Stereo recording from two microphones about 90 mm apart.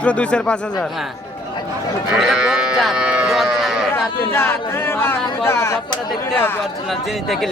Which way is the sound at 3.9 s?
30° left (ahead or behind).